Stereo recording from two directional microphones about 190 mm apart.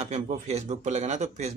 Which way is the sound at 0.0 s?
35° right (ahead or behind).